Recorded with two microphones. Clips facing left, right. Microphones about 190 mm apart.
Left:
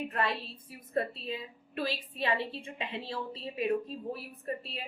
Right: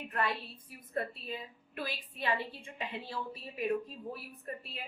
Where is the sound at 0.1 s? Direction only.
25° left (ahead or behind).